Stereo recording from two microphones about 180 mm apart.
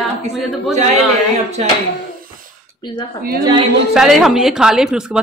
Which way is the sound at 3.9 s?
Centre (ahead or behind).